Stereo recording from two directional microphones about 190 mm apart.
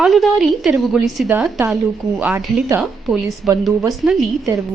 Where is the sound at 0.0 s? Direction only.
Centre (ahead or behind).